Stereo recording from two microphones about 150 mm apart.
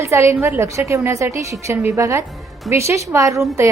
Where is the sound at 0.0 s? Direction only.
20° right (ahead or behind).